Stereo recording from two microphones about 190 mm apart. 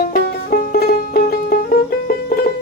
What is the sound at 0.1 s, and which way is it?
Music, 50° left (ahead or behind).